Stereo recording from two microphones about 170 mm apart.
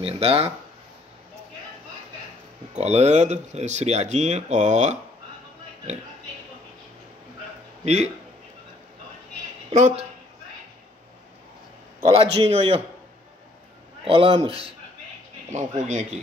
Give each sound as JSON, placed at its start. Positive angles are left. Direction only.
{"t": 0.0, "sound": "speech", "side_deg": -35}
{"t": 2.8, "sound": "speech", "side_deg": -40}
{"t": 7.8, "sound": "speech", "side_deg": -40}
{"t": 9.7, "sound": "speech", "side_deg": -40}
{"t": 12.0, "sound": "speech", "side_deg": -35}
{"t": 14.0, "sound": "speech", "side_deg": -35}